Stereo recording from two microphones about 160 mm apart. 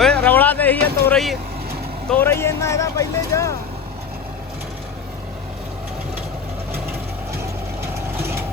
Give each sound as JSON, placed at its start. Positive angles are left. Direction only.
{"t": 0.0, "sound": "vehicle", "side_deg": 5}
{"t": 2.0, "sound": "speech", "side_deg": 10}